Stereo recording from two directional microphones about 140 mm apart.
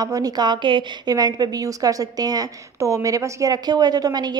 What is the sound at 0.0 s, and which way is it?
A woman's voice, 30° right (ahead or behind).